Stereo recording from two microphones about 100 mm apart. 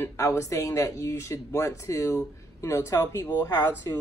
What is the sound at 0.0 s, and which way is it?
Speech, 30° left (ahead or behind).